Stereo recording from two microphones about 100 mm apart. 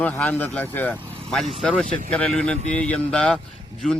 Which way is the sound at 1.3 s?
Centre (ahead or behind).